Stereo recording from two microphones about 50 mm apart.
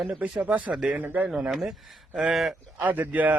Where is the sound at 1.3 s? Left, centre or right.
Centre.